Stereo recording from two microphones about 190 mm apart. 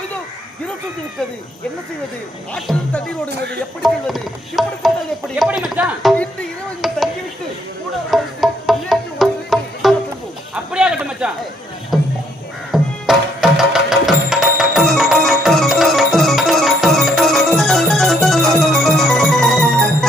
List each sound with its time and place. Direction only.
2.5 s music: 5° left (ahead or behind)
3.2 s speech: 60° right (ahead or behind)
3.8 s music: centre (ahead or behind)
8.1 s music: centre (ahead or behind)
10.5 s a sound: 5° right (ahead or behind)
11.9 s music: centre (ahead or behind)